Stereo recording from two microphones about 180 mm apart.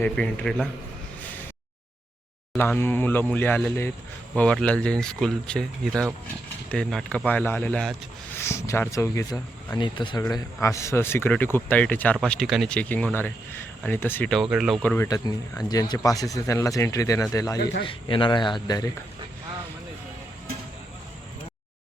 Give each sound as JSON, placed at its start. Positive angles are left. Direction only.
{"t": 0.0, "sound": "speech", "side_deg": 5}
{"t": 2.6, "sound": "speech", "side_deg": 10}
{"t": 14.5, "sound": "speech", "side_deg": -5}
{"t": 14.8, "sound": "speech", "side_deg": 10}
{"t": 17.6, "sound": "a man's voice", "side_deg": 65}
{"t": 17.8, "sound": "speech", "side_deg": 30}